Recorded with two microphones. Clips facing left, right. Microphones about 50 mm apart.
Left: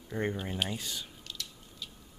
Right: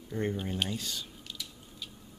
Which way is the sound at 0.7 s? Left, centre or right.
Centre.